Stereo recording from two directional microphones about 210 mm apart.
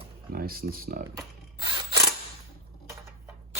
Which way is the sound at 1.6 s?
20° right (ahead or behind).